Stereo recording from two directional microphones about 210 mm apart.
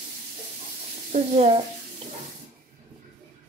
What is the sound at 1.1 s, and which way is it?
Speech, 30° right (ahead or behind).